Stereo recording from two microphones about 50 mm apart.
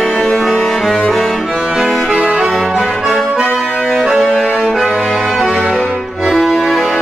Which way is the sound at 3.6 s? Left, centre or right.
Centre.